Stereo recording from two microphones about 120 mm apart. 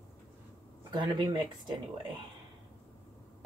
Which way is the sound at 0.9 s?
40° right (ahead or behind).